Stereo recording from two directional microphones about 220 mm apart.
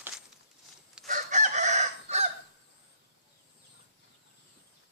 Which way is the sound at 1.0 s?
35° right (ahead or behind).